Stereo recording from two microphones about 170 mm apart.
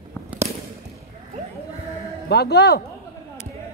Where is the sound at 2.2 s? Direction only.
70° left (ahead or behind).